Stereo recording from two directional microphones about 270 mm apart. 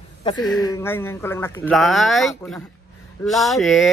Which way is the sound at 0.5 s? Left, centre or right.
Centre.